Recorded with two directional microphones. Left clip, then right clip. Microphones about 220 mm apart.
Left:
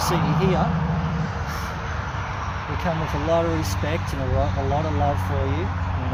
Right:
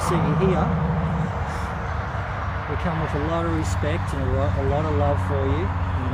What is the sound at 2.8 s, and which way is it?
Speech, 40° left (ahead or behind).